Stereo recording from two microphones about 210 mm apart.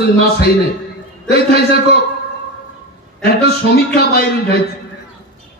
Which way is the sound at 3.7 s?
45° left (ahead or behind).